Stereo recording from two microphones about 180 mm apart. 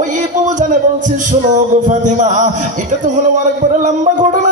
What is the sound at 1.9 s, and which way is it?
Music, 45° right (ahead or behind).